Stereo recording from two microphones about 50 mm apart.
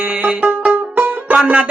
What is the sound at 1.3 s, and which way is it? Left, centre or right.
Music, centre.